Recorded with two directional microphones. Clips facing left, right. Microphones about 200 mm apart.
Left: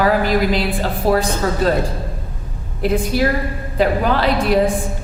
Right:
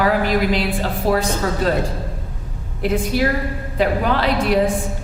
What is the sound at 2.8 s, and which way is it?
A woman's voice, 35° left (ahead or behind).